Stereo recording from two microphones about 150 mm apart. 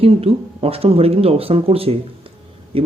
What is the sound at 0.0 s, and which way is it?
Speech, 40° right (ahead or behind).